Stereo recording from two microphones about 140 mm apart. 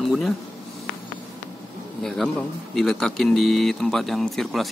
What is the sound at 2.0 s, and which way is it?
Speech, centre (ahead or behind).